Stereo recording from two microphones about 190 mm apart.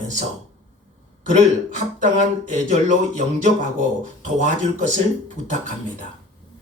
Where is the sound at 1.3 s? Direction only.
40° right (ahead or behind).